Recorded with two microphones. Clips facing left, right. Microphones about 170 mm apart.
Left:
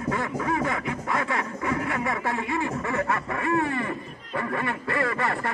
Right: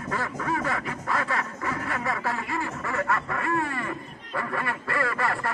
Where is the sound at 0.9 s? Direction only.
15° left (ahead or behind).